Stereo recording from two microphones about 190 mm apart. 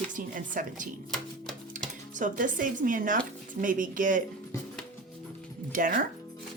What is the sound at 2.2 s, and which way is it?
A woman's voice, 45° right (ahead or behind).